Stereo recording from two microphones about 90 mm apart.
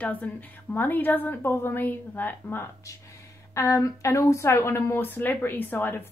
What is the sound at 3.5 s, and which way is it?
A woman's voice, 35° left (ahead or behind).